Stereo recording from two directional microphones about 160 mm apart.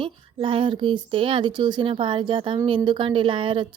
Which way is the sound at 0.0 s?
35° right (ahead or behind).